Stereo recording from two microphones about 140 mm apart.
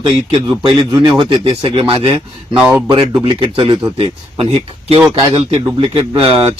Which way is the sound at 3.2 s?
40° right (ahead or behind).